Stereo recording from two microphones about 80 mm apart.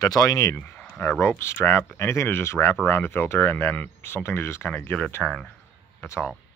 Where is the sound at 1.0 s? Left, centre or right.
Left.